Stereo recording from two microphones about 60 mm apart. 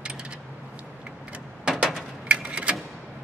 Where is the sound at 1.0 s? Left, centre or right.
Centre.